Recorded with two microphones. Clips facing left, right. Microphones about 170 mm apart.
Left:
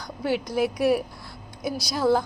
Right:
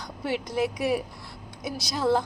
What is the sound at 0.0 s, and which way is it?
A woman's voice, centre (ahead or behind).